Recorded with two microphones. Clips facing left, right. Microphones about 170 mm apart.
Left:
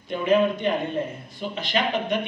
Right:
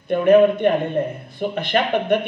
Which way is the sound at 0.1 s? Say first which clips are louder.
Right 7 dB; 55° right (ahead or behind).